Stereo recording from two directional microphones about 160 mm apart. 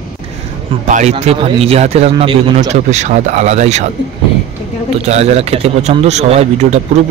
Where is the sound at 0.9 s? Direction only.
45° right (ahead or behind).